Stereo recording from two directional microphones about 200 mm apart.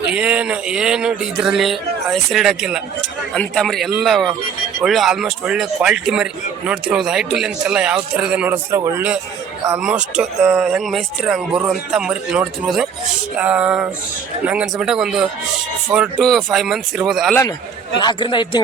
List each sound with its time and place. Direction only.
0.1 s speech: 5° right (ahead or behind)
18.0 s speech: 25° left (ahead or behind)